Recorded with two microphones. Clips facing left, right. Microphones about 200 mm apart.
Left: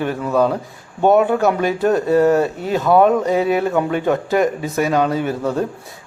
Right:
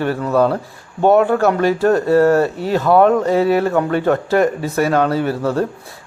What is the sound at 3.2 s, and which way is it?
Speech, 20° left (ahead or behind).